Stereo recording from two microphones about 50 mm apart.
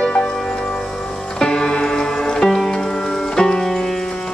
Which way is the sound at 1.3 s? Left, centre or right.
Centre.